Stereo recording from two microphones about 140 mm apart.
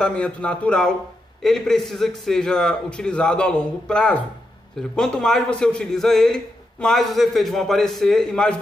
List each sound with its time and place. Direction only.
0.0 s a man's voice: 10° left (ahead or behind)